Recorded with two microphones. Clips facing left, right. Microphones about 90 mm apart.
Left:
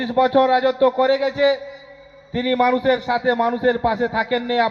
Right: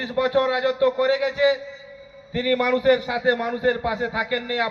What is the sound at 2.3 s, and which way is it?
A man's voice, 25° left (ahead or behind).